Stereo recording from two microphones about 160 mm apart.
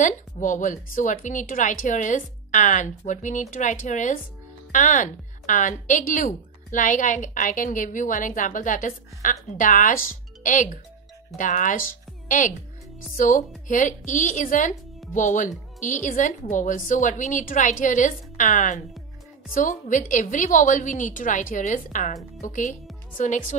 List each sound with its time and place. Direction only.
0.0 s a woman's voice: 50° left (ahead or behind)
13.7 s speech: 55° left (ahead or behind)